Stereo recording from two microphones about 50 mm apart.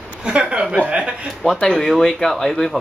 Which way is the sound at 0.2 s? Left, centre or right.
Right.